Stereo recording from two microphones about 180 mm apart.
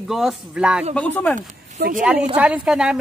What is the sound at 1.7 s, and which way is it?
Speech, 60° right (ahead or behind).